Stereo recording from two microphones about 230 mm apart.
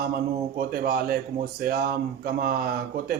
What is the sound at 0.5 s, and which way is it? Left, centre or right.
A man's voice, right.